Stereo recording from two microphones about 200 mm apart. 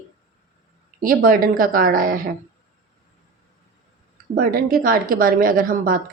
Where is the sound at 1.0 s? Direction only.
45° right (ahead or behind).